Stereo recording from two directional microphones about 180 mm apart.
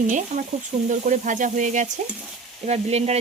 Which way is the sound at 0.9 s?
45° right (ahead or behind).